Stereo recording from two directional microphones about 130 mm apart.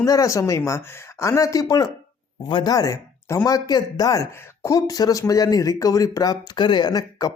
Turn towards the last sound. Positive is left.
turn(degrees=30)  # may be behind; listen again after turning